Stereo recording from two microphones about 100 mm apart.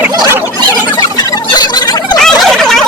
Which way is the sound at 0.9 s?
40° left (ahead or behind).